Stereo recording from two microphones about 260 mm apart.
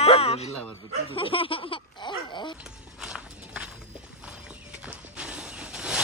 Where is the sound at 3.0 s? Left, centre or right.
Centre.